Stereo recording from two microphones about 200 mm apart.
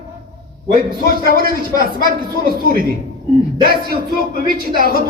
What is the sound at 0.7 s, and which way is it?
A man's voice, 45° right (ahead or behind).